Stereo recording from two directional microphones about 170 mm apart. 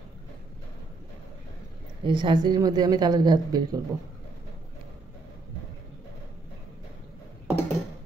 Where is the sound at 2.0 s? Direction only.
25° right (ahead or behind).